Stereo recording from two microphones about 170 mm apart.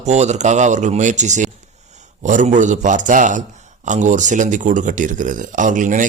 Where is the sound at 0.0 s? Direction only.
40° right (ahead or behind).